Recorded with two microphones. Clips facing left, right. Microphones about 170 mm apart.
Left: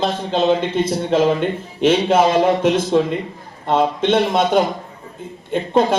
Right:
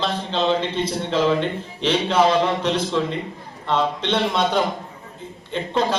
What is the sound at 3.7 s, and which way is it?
A man's voice, 50° left (ahead or behind).